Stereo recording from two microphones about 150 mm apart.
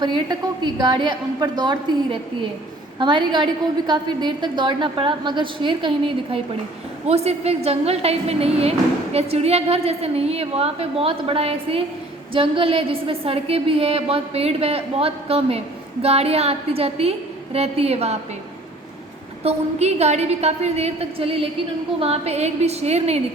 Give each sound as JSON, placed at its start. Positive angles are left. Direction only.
{"t": 0.0, "sound": "a woman's voice", "side_deg": -30}
{"t": 7.1, "sound": "a woman's voice", "side_deg": -45}
{"t": 19.5, "sound": "a woman's voice", "side_deg": -45}